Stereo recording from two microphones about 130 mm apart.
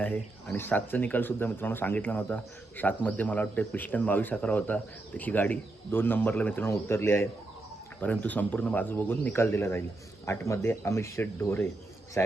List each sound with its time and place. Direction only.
0.0 s speech: 10° left (ahead or behind)